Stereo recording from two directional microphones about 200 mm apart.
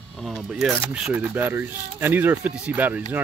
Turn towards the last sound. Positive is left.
turn(degrees=-10)  # may be behind; listen again after turning